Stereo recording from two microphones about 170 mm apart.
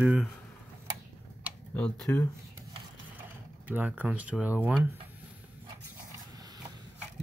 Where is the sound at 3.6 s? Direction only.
10° right (ahead or behind).